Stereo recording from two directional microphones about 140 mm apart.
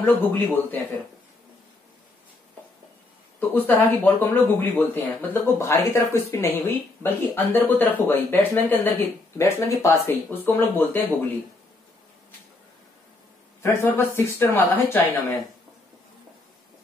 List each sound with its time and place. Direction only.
0.0 s speech: 15° left (ahead or behind)
3.3 s speech: 15° left (ahead or behind)
13.6 s speech: 20° left (ahead or behind)